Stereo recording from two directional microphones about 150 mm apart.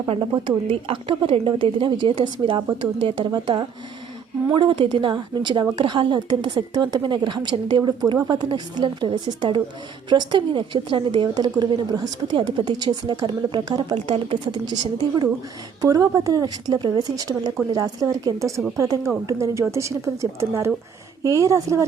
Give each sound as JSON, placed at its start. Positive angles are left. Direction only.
{"t": 0.1, "sound": "a woman's voice", "side_deg": -35}
{"t": 21.3, "sound": "a woman's voice", "side_deg": -20}